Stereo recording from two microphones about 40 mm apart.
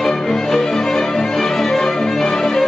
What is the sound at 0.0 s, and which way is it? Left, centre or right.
Music, centre.